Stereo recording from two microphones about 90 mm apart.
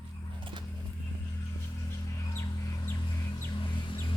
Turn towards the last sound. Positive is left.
turn(degrees=60)  # may be behind; listen again after turning